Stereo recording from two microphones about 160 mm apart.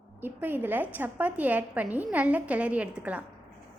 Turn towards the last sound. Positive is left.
turn(degrees=-10)  # may be behind; listen again after turning